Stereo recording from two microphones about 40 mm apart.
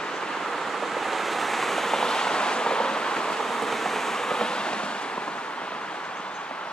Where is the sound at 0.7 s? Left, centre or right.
Centre.